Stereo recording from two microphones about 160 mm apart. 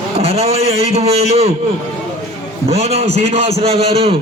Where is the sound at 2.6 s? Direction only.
40° right (ahead or behind).